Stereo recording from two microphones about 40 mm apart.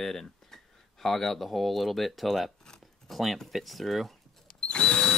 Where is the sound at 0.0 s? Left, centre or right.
Centre.